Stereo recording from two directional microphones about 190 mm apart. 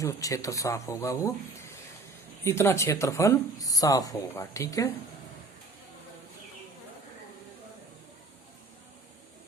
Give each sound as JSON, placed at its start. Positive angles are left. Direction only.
{"t": 0.0, "sound": "speech", "side_deg": 15}